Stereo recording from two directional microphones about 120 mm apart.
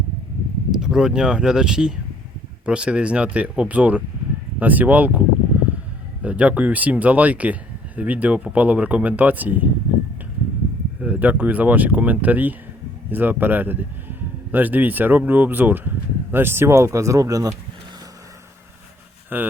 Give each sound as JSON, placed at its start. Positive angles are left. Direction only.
{"t": 0.8, "sound": "speech", "side_deg": -5}
{"t": 6.2, "sound": "speech", "side_deg": -10}
{"t": 11.0, "sound": "speech", "side_deg": -15}
{"t": 19.3, "sound": "speech", "side_deg": -15}